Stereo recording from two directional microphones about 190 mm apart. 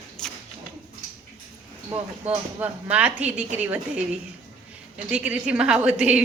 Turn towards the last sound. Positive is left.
turn(degrees=-5)  # may be behind; listen again after turning